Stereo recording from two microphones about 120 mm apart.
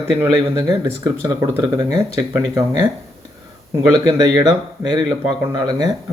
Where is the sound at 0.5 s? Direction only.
35° right (ahead or behind).